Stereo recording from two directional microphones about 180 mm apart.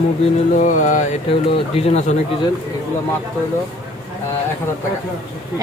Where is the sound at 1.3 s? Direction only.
30° left (ahead or behind).